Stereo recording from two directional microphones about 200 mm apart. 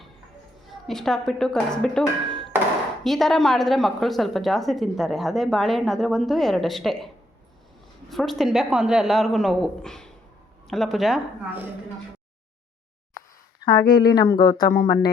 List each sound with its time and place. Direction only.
0.7 s a woman's voice: centre (ahead or behind)
8.1 s a woman's voice: centre (ahead or behind)
13.7 s speech: 20° left (ahead or behind)